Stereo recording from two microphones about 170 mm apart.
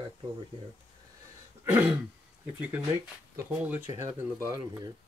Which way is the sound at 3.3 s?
10° right (ahead or behind).